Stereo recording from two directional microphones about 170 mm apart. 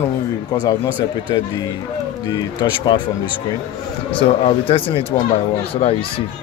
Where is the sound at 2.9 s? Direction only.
25° left (ahead or behind).